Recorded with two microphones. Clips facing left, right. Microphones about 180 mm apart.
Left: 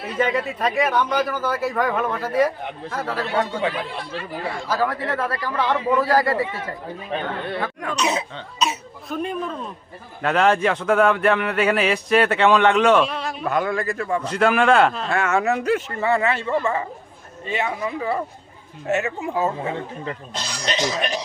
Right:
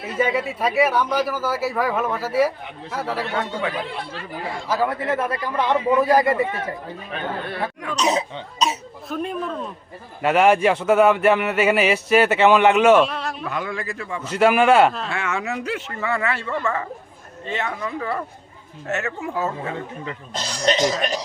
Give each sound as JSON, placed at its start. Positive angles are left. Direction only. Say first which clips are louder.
{"t": 0.1, "sound": "speech", "louder": "even", "side_deg": -10}
{"t": 4.7, "sound": "a man's voice", "louder": "right 2 dB", "side_deg": -25}
{"t": 7.9, "sound": "cough", "louder": "right 3 dB", "side_deg": -40}
{"t": 9.0, "sound": "speech", "louder": "even", "side_deg": 0}
{"t": 13.4, "sound": "speech", "louder": "left 5 dB", "side_deg": 50}
{"t": 14.3, "sound": "speech", "louder": "right 2 dB", "side_deg": -5}
{"t": 15.1, "sound": "speech", "louder": "left 6 dB", "side_deg": 45}
{"t": 16.0, "sound": "speech", "louder": "left 4 dB", "side_deg": 25}
{"t": 20.3, "sound": "speech", "louder": "right 7 dB", "side_deg": -45}